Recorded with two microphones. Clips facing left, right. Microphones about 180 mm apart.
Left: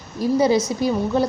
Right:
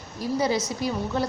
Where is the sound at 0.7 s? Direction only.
25° left (ahead or behind).